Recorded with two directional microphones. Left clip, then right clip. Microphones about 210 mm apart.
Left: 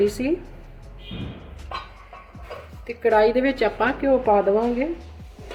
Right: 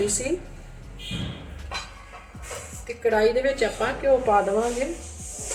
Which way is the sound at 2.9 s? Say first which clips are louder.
Left 3 dB; 40° left (ahead or behind).